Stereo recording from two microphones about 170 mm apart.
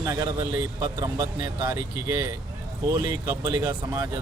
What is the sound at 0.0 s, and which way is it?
Speech, 15° right (ahead or behind).